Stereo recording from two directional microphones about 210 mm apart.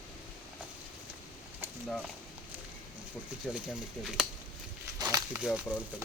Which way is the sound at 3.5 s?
5° right (ahead or behind).